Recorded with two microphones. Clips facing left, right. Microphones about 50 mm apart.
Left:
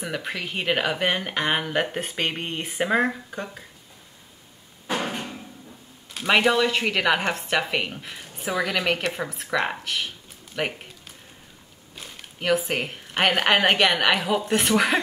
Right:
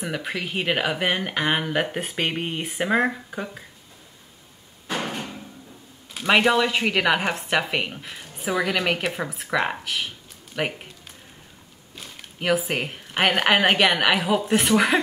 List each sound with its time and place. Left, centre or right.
0.0 s speech: centre
4.8 s a sound: centre
6.1 s speech: centre
12.0 s speech: centre